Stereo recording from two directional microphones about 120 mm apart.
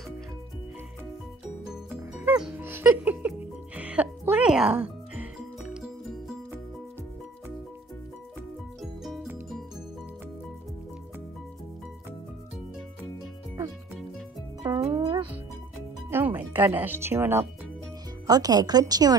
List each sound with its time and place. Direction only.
1.9 s music: 15° right (ahead or behind)
8.8 s music: centre (ahead or behind)
14.6 s music: 30° right (ahead or behind)
14.9 s music: 45° right (ahead or behind)
16.1 s music: 15° right (ahead or behind)
18.2 s speech: 30° right (ahead or behind)